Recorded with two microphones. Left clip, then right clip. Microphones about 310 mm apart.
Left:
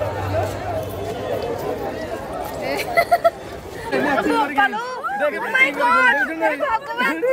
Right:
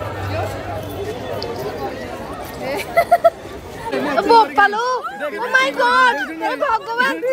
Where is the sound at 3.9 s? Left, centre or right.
Centre.